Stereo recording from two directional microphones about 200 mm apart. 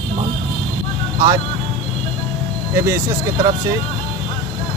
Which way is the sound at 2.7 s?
15° right (ahead or behind).